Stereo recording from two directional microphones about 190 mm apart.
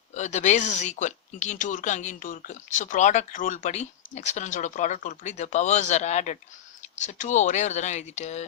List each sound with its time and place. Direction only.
0.1 s speech: 35° left (ahead or behind)